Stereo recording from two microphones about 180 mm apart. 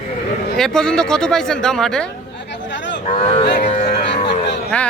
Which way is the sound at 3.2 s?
35° left (ahead or behind).